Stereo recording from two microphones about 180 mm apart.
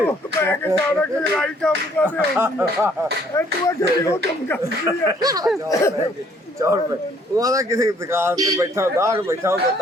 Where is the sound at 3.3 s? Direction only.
15° left (ahead or behind).